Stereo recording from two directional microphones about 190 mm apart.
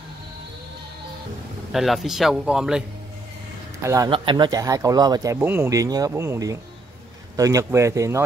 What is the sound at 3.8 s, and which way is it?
Speech, 15° right (ahead or behind).